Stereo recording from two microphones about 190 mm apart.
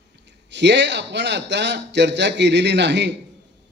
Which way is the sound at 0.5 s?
65° right (ahead or behind).